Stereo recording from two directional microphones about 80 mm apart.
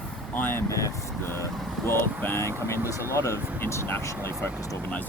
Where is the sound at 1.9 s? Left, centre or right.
Left.